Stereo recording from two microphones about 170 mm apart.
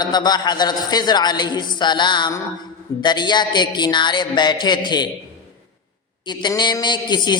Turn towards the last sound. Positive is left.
turn(degrees=25)  # may be behind; listen again after turning